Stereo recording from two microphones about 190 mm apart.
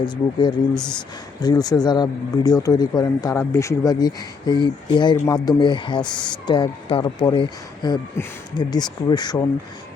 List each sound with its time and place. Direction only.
0.0 s speech: 25° left (ahead or behind)